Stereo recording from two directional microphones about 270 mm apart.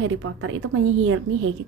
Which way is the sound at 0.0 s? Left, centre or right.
Right.